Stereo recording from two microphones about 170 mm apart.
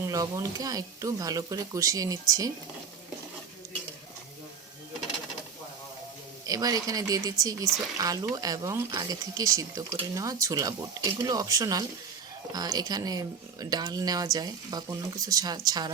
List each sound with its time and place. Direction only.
0.0 s speech: 20° right (ahead or behind)
6.4 s speech: 20° right (ahead or behind)